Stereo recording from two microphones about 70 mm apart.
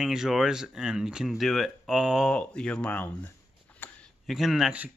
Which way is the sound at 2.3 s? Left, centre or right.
Centre.